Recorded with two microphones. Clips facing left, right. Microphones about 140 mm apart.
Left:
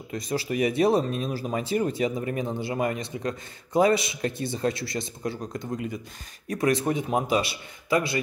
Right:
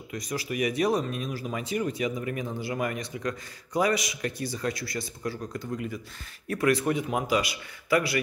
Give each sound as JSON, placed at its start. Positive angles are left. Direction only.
{"t": 0.1, "sound": "speech", "side_deg": 30}